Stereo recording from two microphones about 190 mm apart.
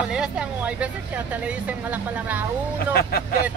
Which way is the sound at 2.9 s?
55° left (ahead or behind).